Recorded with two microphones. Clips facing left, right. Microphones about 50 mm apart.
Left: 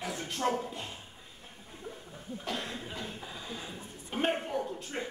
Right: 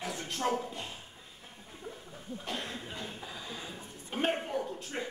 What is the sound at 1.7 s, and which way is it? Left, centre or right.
Chuckle, centre.